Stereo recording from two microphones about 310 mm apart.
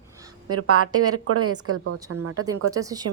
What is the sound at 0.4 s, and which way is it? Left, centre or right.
A woman's voice, right.